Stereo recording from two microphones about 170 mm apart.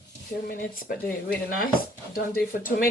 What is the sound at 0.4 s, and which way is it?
Speech, 60° left (ahead or behind).